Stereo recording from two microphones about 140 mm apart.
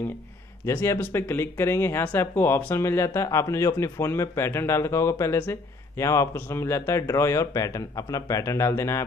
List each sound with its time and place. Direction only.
0.7 s speech: 15° left (ahead or behind)